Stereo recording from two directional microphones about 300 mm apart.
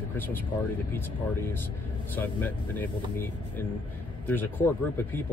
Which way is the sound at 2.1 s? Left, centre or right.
Centre.